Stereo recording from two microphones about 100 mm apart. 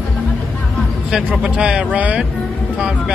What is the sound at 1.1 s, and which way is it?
Speech, 10° right (ahead or behind).